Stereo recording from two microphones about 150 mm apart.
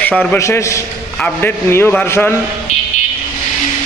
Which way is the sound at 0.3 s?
20° left (ahead or behind).